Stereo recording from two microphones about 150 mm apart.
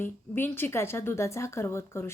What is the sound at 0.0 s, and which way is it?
A woman's voice, 15° left (ahead or behind).